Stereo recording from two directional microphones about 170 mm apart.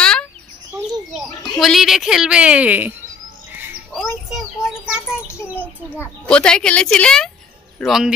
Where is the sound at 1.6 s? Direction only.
Centre (ahead or behind).